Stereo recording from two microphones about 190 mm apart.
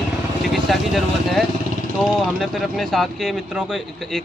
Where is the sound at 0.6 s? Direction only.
Centre (ahead or behind).